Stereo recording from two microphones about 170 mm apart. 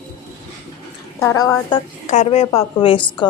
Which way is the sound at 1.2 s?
20° left (ahead or behind).